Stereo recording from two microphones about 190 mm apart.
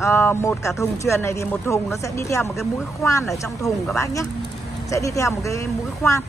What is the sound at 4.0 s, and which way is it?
Speech, 15° left (ahead or behind).